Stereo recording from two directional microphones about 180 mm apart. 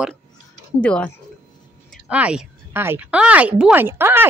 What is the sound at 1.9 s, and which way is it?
Speech, 5° right (ahead or behind).